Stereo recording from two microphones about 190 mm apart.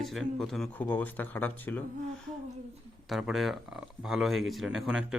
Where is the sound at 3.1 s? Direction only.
Centre (ahead or behind).